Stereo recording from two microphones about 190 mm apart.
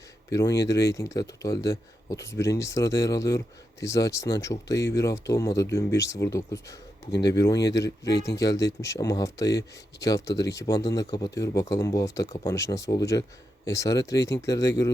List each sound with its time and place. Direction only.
0.3 s speech: 15° left (ahead or behind)